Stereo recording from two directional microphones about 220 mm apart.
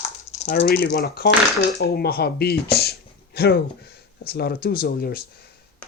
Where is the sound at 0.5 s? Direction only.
45° left (ahead or behind).